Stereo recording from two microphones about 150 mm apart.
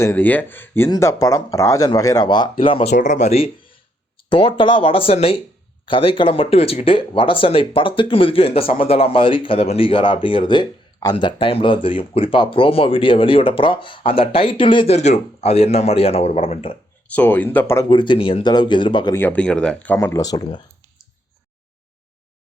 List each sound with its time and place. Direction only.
0.0 s speech: 15° left (ahead or behind); by 2.9 s 40° left (ahead or behind)
2.9 s speech: 55° left (ahead or behind)
4.2 s speech: 35° left (ahead or behind)
14.9 s speech: 45° left (ahead or behind)
17.1 s speech: 10° left (ahead or behind)
17.8 s speech: 35° left (ahead or behind)
19.1 s speech: 10° left (ahead or behind)